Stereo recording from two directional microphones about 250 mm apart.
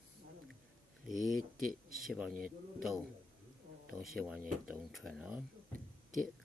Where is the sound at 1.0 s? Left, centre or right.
Centre.